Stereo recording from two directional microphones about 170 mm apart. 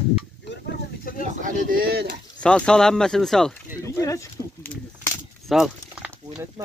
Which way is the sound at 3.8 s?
20° left (ahead or behind).